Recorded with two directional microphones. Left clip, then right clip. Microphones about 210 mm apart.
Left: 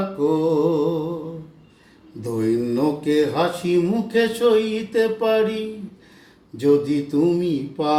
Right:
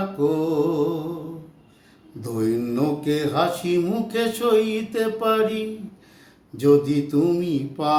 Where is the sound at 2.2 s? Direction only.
15° right (ahead or behind).